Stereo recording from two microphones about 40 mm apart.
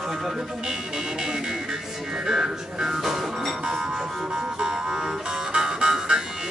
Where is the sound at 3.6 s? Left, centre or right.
Centre.